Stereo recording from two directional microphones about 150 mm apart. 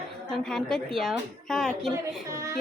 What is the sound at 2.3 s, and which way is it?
Speech, 20° right (ahead or behind).